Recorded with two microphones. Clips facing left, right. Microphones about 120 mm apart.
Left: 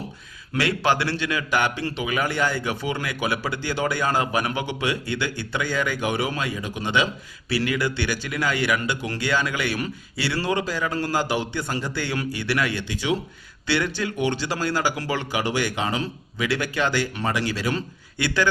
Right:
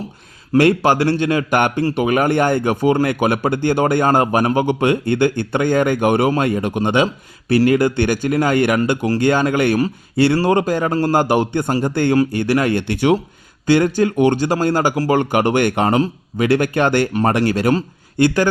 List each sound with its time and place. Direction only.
0.5 s speech: 50° right (ahead or behind)